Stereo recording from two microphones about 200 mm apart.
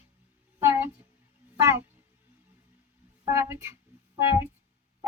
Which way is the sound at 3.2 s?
15° right (ahead or behind).